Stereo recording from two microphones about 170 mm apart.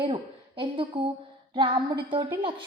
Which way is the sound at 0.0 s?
30° right (ahead or behind).